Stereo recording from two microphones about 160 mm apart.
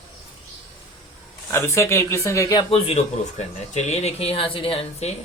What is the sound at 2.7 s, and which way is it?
A man's voice, 40° left (ahead or behind).